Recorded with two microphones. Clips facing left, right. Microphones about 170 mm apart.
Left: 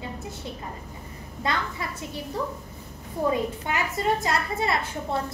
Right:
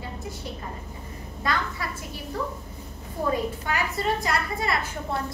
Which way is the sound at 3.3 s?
20° left (ahead or behind).